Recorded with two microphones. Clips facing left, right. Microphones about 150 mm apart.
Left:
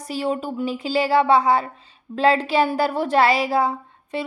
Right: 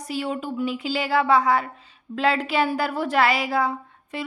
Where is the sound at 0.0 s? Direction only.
35° left (ahead or behind).